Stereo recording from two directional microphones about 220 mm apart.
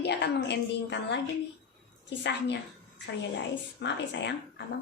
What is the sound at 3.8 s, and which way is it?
Speech, 50° left (ahead or behind).